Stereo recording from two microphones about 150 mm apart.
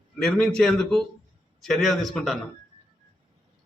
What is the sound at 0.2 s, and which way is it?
A man's voice, centre (ahead or behind).